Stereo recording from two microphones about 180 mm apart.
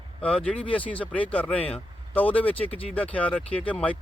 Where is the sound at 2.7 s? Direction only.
35° left (ahead or behind).